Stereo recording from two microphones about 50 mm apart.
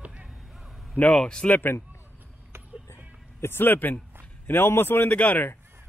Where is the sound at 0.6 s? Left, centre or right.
Centre.